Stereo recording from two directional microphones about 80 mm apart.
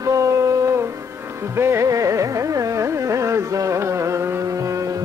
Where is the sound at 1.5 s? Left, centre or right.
Right.